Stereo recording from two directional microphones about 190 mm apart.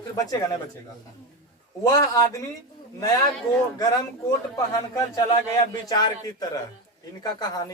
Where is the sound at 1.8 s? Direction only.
20° left (ahead or behind).